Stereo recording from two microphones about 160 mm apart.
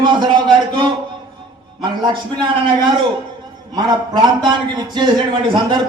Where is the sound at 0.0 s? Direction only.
30° right (ahead or behind).